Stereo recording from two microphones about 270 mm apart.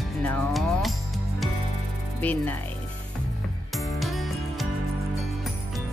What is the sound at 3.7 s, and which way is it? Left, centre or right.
Music, centre.